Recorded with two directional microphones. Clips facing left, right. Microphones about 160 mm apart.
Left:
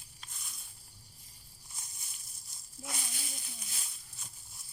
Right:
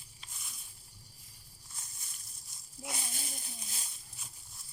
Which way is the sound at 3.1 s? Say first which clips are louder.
Right 1 dB; 40° right (ahead or behind).